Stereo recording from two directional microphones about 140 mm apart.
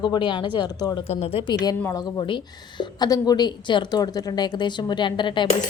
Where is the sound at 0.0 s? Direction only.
35° left (ahead or behind).